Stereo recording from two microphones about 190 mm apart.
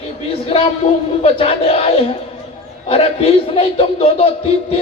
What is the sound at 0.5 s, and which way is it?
A man's voice, 30° left (ahead or behind).